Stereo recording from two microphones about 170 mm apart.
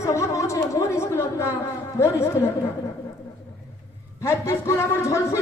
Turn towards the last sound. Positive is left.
turn(degrees=15)  # may be behind; listen again after turning